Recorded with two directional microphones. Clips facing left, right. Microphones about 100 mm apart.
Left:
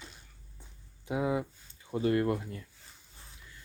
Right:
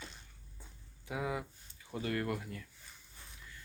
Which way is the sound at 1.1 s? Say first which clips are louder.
Left 7 dB; 25° left (ahead or behind).